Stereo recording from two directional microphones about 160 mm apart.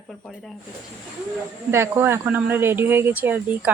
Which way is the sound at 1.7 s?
15° right (ahead or behind).